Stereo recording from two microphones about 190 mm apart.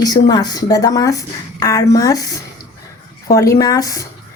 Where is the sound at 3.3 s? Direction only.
15° left (ahead or behind).